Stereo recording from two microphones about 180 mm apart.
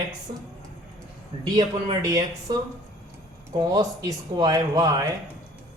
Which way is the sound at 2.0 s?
20° right (ahead or behind).